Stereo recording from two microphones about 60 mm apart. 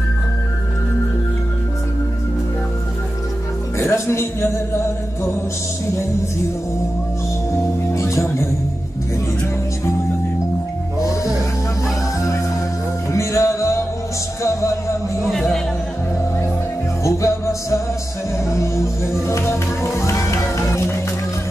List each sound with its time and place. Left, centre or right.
3.7 s music: left
7.9 s speech: left
11.0 s music: left
13.1 s music: left
15.2 s music: centre
17.0 s music: left